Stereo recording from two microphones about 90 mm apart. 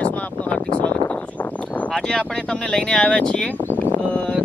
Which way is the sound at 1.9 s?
10° left (ahead or behind).